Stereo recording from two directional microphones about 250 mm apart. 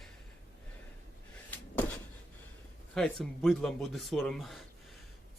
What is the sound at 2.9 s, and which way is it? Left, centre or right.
Speech, centre.